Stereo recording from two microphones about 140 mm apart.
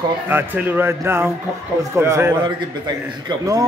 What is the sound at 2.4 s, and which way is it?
A man's voice, 30° right (ahead or behind).